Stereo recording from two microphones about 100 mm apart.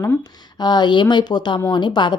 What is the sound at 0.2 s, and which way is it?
Speech, 45° left (ahead or behind).